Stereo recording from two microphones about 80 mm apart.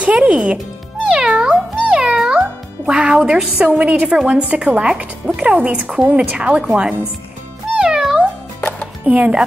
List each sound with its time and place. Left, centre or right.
0.0 s music: centre
1.0 s cat: centre
2.9 s a woman's voice: centre
7.7 s music: centre
8.5 s music: left
9.0 s a woman's voice: centre